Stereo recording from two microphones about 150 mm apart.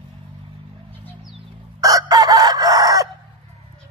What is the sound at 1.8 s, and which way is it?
Chicken, 25° right (ahead or behind).